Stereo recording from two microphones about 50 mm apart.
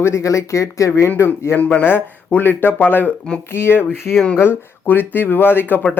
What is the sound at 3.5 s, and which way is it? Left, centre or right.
Speech, left.